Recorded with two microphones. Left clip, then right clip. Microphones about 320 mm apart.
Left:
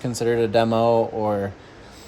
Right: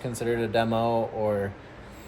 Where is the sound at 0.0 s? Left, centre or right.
Left.